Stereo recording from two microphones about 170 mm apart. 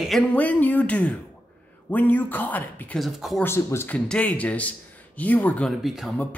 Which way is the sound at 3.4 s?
15° left (ahead or behind).